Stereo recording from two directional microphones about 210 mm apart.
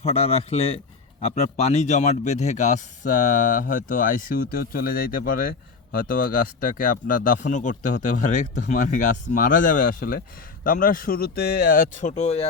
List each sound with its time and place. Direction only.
0.0 s speech: 30° left (ahead or behind)